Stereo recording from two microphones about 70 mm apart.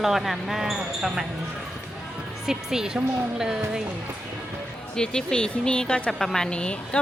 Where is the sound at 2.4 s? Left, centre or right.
Centre.